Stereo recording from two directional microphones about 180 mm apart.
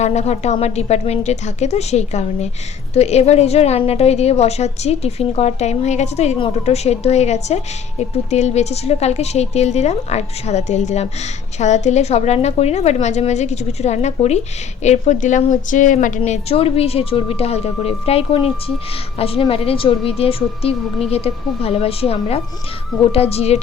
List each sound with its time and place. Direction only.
0.0 s a woman's voice: 40° left (ahead or behind)